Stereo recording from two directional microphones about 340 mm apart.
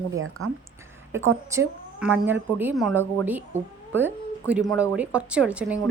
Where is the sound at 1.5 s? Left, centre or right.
Centre.